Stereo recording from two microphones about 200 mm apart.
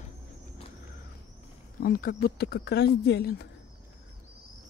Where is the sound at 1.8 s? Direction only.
50° left (ahead or behind).